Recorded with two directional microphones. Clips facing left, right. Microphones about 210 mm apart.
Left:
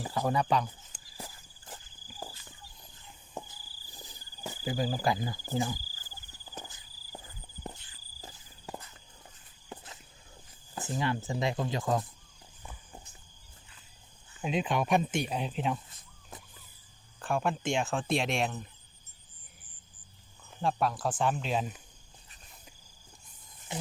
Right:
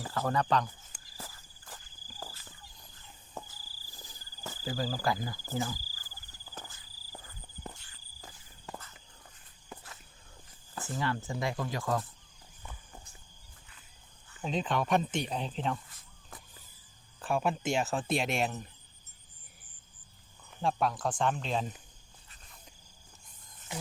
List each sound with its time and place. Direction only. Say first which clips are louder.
0.0 s speech: left 2 dB; 15° left (ahead or behind)
1.1 s cricket: left 2 dB; 20° left (ahead or behind)
9.6 s walk: left 2 dB; 20° left (ahead or behind)
10.8 s speech: left 2 dB; 20° left (ahead or behind)
14.4 s speech: left 2 dB; 10° left (ahead or behind)
17.2 s speech: even; 5° right (ahead or behind)
20.6 s speech: left 1 dB; centre (ahead or behind)